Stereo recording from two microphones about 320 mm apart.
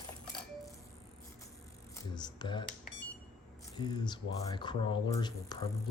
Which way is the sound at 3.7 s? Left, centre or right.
Centre.